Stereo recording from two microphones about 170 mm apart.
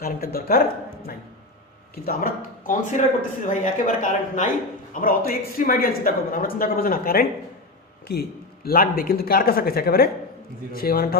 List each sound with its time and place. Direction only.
0.0 s speech: 60° left (ahead or behind)
2.0 s speech: 60° left (ahead or behind)
4.9 s speech: 60° left (ahead or behind)